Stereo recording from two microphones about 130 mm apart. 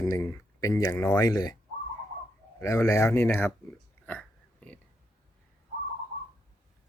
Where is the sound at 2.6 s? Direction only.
25° left (ahead or behind).